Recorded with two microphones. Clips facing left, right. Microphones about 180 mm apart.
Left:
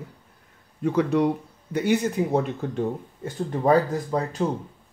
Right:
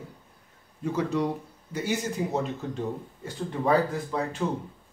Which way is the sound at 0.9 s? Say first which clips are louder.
Left 6 dB; 60° left (ahead or behind).